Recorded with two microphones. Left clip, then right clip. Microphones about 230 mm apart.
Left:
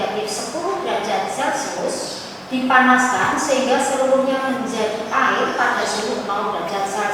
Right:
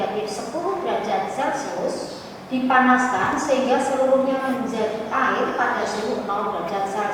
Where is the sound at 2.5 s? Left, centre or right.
Centre.